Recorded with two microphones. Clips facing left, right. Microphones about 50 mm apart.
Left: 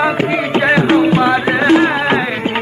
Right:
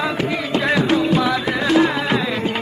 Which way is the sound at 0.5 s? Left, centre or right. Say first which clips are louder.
Left 6 dB; left.